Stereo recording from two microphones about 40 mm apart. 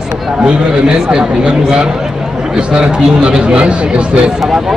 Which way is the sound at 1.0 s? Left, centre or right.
Centre.